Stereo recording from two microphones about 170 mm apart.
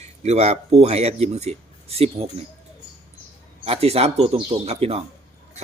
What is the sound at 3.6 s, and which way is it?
Speech, 35° right (ahead or behind).